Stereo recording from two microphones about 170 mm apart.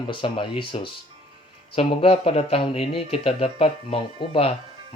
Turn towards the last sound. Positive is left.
turn(degrees=30)  # may be behind; listen again after turning